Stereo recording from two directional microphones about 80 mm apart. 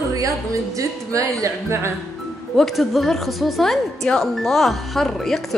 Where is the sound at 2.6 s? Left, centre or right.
Centre.